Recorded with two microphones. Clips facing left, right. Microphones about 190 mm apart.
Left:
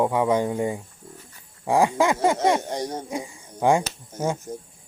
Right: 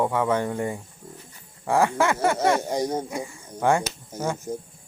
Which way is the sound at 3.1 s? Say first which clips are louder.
Left 1 dB; 15° left (ahead or behind).